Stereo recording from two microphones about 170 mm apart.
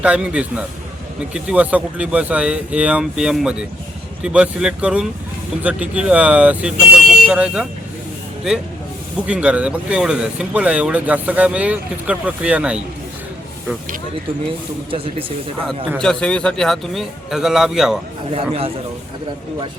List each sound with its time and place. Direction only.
0.0 s a man's voice: 5° right (ahead or behind)
14.8 s speech: 35° right (ahead or behind)
16.0 s a man's voice: 5° left (ahead or behind)
18.3 s speech: 35° right (ahead or behind)